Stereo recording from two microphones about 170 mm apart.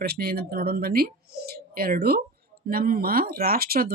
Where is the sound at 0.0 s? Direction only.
65° right (ahead or behind).